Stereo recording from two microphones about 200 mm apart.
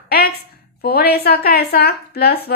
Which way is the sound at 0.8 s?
50° left (ahead or behind).